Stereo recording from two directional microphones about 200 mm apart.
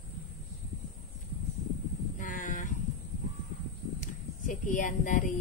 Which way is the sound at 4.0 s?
40° left (ahead or behind).